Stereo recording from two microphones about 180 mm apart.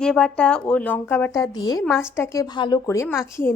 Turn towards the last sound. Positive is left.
turn(degrees=15)  # may be behind; listen again after turning